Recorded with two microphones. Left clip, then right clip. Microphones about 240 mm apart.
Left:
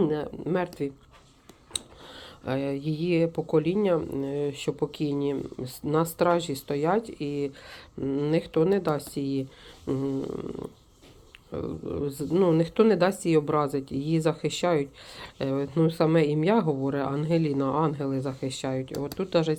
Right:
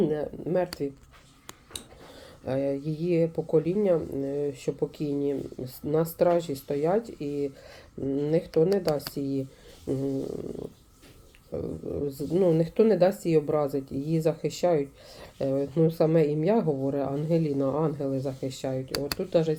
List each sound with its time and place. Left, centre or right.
0.4 s speech: centre
2.1 s speech: centre
11.5 s speech: centre